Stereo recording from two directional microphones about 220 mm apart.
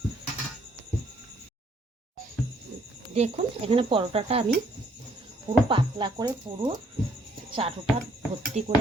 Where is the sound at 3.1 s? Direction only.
30° right (ahead or behind).